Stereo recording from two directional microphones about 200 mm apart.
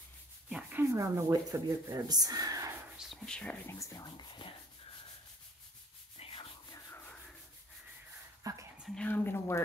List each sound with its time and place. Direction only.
0.5 s speech: 5° right (ahead or behind)
3.0 s speech: centre (ahead or behind); by 4.5 s 20° left (ahead or behind)
8.7 s speech: 5° left (ahead or behind)